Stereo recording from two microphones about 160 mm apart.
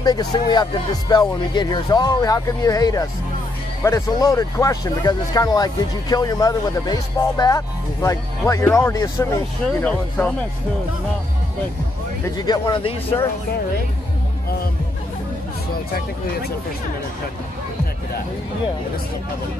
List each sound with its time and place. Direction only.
0.0 s speech: 25° left (ahead or behind); by 10.3 s 10° left (ahead or behind)
12.4 s speech: 25° left (ahead or behind)